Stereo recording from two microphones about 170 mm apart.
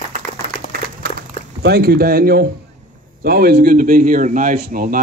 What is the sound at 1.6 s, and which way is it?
Speech, 65° right (ahead or behind).